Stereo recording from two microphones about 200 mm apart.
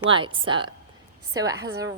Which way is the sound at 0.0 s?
25° right (ahead or behind).